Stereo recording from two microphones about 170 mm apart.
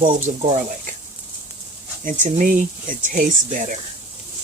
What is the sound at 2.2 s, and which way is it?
Speech, 50° right (ahead or behind).